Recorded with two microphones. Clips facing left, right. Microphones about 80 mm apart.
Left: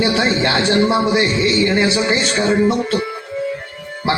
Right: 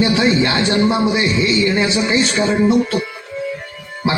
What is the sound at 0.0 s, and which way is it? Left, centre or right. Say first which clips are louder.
A man's voice: right 2 dB; left.